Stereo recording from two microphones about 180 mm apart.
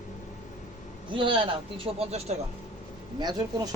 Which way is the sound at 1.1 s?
30° right (ahead or behind).